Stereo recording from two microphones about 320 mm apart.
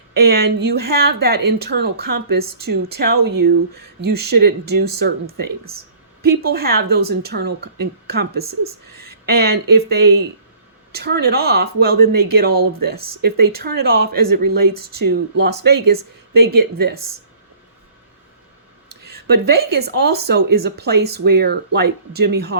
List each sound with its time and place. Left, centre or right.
0.1 s speech: right
18.9 s speech: right